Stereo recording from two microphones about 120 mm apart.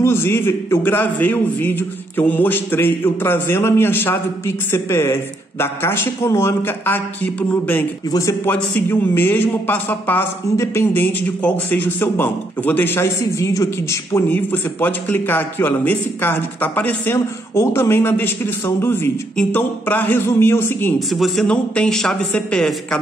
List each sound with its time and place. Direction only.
0.0 s a man's voice: 20° left (ahead or behind)
8.1 s a man's voice: 25° left (ahead or behind)
21.1 s speech: centre (ahead or behind)